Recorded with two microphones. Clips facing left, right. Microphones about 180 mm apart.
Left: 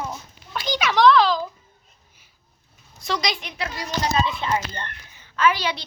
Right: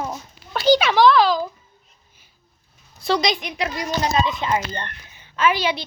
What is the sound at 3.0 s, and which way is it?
Speech, 30° right (ahead or behind).